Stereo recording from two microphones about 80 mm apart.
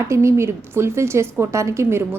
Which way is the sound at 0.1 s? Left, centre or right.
Right.